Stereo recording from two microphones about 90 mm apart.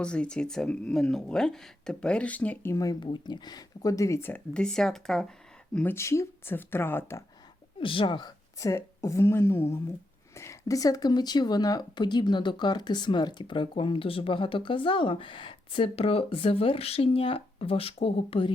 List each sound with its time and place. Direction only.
0.0 s speech: 10° left (ahead or behind)
2.6 s speech: 40° left (ahead or behind)
3.0 s speech: 55° left (ahead or behind); by 4.2 s 35° left (ahead or behind)
4.5 s speech: 5° left (ahead or behind)
5.9 s speech: 30° left (ahead or behind)
7.8 s speech: 75° left (ahead or behind)
8.5 s speech: 35° left (ahead or behind); by 18.5 s 90° left